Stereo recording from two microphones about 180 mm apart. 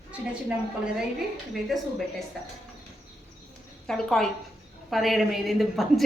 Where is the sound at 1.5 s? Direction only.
Centre (ahead or behind).